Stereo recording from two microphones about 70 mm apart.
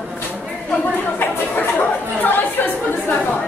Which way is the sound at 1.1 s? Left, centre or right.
Left.